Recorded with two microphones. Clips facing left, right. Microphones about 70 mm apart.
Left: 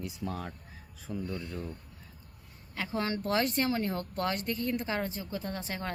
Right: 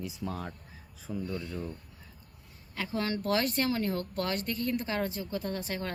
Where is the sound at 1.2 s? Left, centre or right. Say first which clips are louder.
Right 2 dB; centre.